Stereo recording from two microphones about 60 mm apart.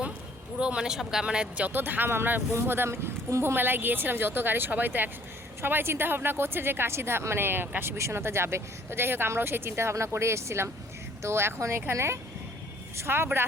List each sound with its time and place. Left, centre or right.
0.6 s speech: centre
1.6 s a woman's voice: right
3.4 s a woman's voice: right
7.9 s a woman's voice: right